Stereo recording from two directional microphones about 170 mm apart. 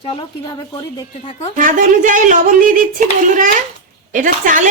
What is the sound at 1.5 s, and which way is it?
A woman's voice, 50° right (ahead or behind).